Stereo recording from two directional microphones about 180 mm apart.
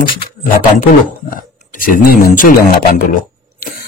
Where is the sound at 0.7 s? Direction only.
50° left (ahead or behind).